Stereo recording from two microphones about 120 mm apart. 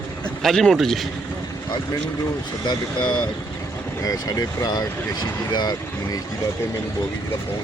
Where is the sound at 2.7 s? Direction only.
40° left (ahead or behind).